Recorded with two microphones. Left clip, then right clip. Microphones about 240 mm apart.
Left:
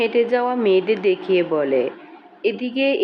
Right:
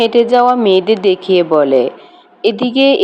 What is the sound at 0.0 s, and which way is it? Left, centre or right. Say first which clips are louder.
Speech: right 9 dB; right.